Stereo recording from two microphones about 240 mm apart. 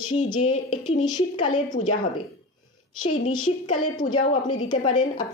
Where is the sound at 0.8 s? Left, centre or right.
Centre.